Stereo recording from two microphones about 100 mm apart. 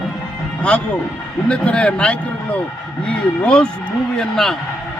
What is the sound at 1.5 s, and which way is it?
A man's voice, 10° left (ahead or behind).